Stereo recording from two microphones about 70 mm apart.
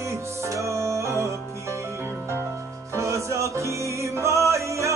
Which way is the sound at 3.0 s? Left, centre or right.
Right.